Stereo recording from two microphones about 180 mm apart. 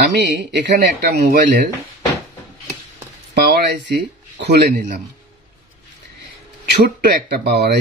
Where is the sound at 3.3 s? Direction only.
65° right (ahead or behind).